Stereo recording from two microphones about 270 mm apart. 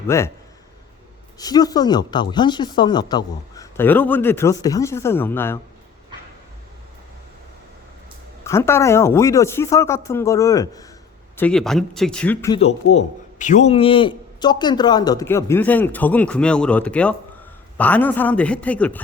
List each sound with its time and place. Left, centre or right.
0.1 s speech: centre
1.4 s speech: centre
8.4 s speech: centre
12.5 s a man's voice: left; by 19.0 s centre